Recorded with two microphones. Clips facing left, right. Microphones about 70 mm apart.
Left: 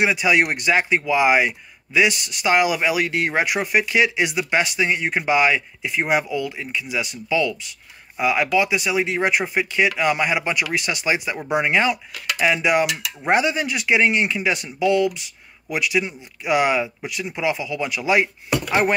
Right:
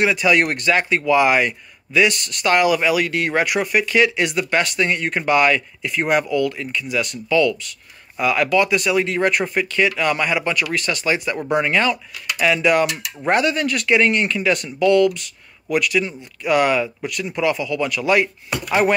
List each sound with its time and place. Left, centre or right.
0.0 s speech: centre